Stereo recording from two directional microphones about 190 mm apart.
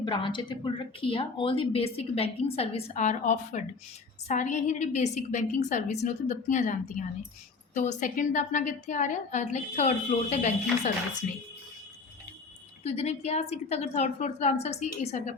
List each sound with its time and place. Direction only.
0.0 s a woman's voice: 25° left (ahead or behind)
12.8 s a woman's voice: 35° left (ahead or behind)